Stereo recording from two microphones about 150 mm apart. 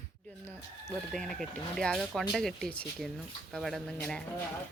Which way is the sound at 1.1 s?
5° left (ahead or behind).